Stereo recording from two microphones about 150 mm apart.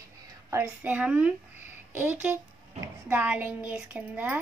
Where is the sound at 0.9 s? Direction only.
10° right (ahead or behind).